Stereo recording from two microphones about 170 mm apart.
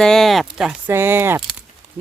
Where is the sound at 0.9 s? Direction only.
15° right (ahead or behind).